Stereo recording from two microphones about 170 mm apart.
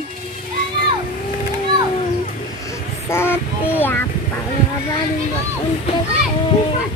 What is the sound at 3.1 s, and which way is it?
Child singing, 15° left (ahead or behind).